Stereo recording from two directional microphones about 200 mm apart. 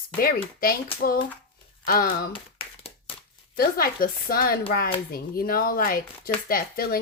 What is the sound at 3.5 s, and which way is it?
Speech, 50° left (ahead or behind).